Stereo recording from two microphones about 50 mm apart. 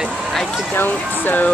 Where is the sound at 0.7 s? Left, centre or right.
Left.